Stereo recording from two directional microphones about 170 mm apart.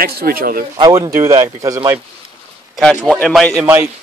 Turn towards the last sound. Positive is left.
turn(degrees=5)  # may be behind; listen again after turning